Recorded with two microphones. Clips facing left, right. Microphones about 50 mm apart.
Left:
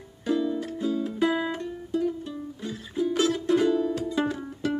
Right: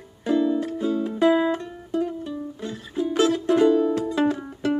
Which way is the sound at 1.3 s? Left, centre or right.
Right.